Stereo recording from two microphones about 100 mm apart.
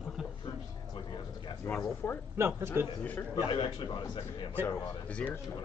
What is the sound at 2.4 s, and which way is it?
Speech, 25° right (ahead or behind).